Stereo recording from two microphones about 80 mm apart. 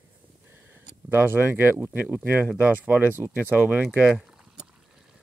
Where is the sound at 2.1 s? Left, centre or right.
Centre.